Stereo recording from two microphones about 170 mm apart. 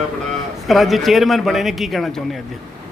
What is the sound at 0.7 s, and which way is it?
Speech, centre (ahead or behind).